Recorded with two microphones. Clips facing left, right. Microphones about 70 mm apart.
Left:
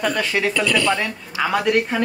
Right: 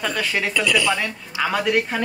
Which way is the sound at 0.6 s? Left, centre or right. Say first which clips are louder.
Right 1 dB; centre.